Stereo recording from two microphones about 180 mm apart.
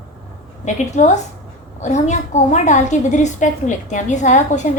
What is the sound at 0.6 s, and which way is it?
A woman's voice, 40° left (ahead or behind).